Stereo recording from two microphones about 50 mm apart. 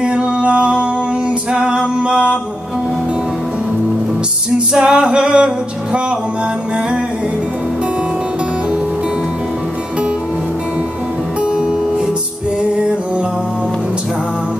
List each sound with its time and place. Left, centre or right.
0.0 s music: right
4.7 s male singing: centre
11.5 s music: centre